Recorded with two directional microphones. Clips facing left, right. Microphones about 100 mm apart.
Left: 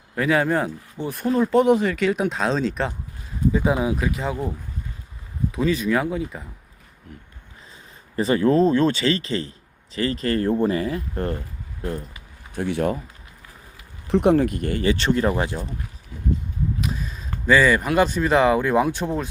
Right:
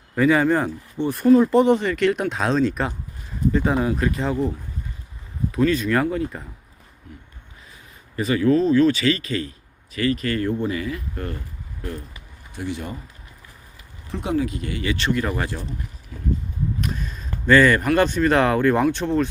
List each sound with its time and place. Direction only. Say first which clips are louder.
0.2 s speech: right 3 dB; centre (ahead or behind)
5.5 s speech: right 2 dB; 5° left (ahead or behind)
8.1 s speech: even; 35° left (ahead or behind)
12.5 s speech: left 6 dB; 55° left (ahead or behind)
14.1 s speech: left 7 dB; 65° left (ahead or behind); by 14.8 s 45° left (ahead or behind)
14.8 s speech: left 3 dB; 35° left (ahead or behind)
16.8 s speech: even; 5° left (ahead or behind)